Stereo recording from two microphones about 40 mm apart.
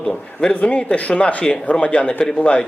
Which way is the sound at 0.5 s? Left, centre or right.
Left.